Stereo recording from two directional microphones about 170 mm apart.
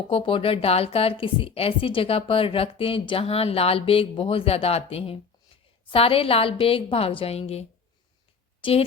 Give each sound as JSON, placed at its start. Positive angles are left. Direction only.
{"t": 0.1, "sound": "a woman's voice", "side_deg": 30}